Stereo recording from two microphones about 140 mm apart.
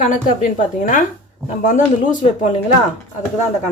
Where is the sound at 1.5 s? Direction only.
65° left (ahead or behind).